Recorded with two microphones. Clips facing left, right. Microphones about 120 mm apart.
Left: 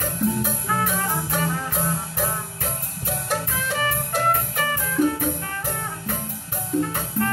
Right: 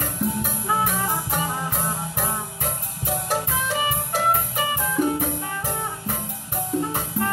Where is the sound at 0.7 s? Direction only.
15° right (ahead or behind).